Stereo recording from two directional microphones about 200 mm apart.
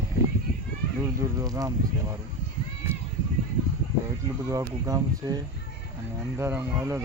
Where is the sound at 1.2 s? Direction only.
15° right (ahead or behind).